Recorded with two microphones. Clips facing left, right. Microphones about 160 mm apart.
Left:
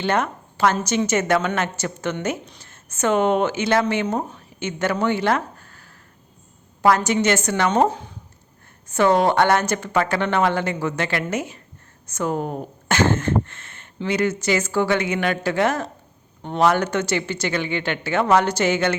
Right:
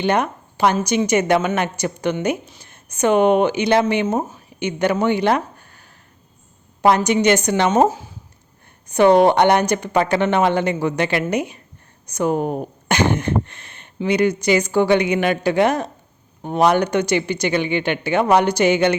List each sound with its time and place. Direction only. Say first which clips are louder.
0.0 s speech: right 3 dB; 15° right (ahead or behind)
7.9 s speech: right 3 dB; 5° right (ahead or behind)
8.9 s speech: right 5 dB; 15° right (ahead or behind)